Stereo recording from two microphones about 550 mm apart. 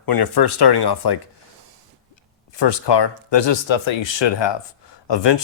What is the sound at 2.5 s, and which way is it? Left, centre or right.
Speech, left.